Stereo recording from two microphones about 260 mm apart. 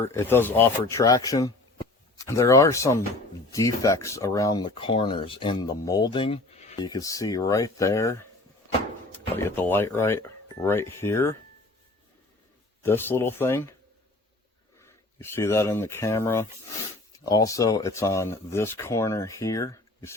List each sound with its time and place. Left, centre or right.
0.0 s speech: centre
9.3 s speech: centre
12.8 s speech: centre
14.8 s speech: centre